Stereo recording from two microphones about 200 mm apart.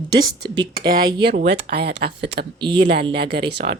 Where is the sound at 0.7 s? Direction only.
50° right (ahead or behind).